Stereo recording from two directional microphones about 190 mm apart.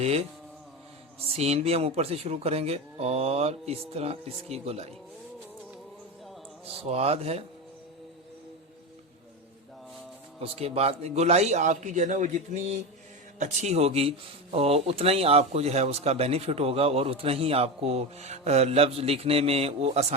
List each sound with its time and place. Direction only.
0.0 s speech: 35° right (ahead or behind)
1.3 s speech: 30° right (ahead or behind)
6.8 s speech: 35° right (ahead or behind)
10.4 s speech: 30° right (ahead or behind)